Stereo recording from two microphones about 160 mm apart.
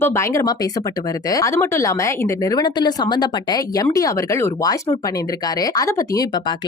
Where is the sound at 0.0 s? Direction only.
20° left (ahead or behind).